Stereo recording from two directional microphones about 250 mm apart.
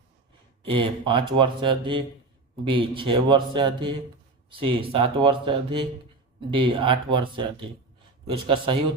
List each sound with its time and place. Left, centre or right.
0.7 s speech: centre